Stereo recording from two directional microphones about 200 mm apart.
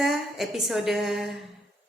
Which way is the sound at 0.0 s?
Centre (ahead or behind).